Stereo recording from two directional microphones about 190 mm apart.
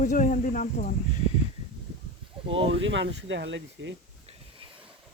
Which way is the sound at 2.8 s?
75° right (ahead or behind).